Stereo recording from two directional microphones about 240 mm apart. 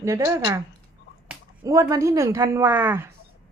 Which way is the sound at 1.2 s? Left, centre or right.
Centre.